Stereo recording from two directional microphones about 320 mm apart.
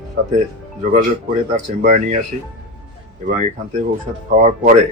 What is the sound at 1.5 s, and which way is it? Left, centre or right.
Speech, right.